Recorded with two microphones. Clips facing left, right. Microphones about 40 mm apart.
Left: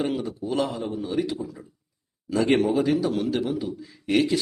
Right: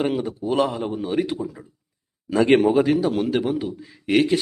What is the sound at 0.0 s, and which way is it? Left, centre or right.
A man's voice, right.